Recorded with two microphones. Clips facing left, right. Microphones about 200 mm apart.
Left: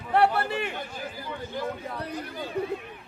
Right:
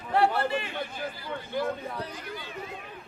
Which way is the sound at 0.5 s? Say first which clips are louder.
Left 1 dB; 60° left (ahead or behind).